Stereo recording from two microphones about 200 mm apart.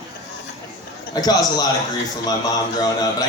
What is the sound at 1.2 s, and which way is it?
Speech, 20° left (ahead or behind).